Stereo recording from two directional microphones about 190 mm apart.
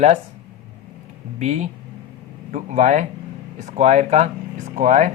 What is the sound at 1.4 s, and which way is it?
Speech, 40° right (ahead or behind).